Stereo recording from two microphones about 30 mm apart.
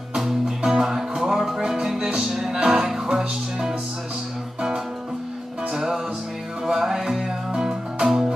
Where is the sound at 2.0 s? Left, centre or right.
Right.